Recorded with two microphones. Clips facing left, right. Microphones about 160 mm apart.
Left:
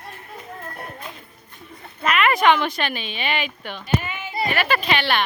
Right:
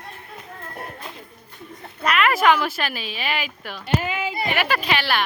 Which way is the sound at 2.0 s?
Centre (ahead or behind).